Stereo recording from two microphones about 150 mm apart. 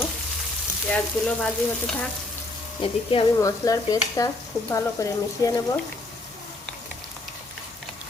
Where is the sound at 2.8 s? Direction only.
35° left (ahead or behind).